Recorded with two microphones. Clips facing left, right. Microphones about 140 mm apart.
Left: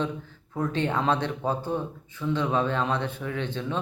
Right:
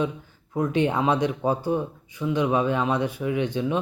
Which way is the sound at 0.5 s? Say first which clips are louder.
Right 4 dB; 15° right (ahead or behind).